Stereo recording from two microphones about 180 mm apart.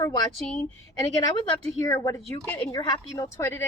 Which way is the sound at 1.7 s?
15° left (ahead or behind).